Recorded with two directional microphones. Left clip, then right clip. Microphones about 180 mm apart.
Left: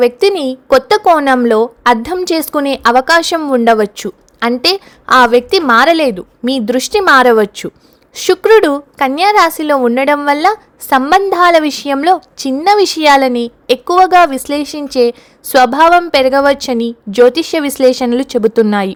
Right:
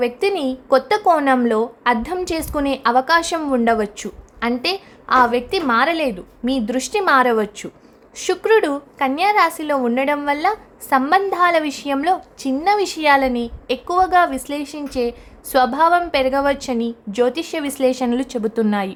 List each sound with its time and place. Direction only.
0.0 s a woman's voice: 35° left (ahead or behind)